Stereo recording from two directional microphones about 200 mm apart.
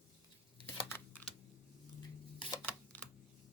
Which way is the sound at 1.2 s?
10° left (ahead or behind).